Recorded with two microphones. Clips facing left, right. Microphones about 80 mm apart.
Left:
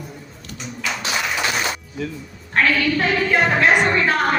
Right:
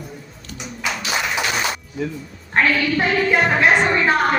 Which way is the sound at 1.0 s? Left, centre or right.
Centre.